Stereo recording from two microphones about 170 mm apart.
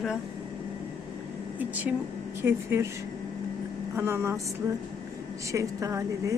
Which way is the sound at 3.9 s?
15° right (ahead or behind).